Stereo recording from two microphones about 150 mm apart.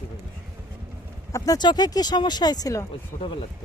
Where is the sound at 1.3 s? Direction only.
25° left (ahead or behind).